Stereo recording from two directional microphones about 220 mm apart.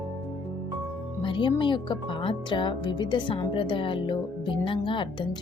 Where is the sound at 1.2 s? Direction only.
20° left (ahead or behind).